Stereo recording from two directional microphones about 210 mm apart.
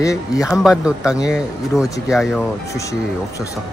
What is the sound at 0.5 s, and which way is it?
Speech, centre (ahead or behind).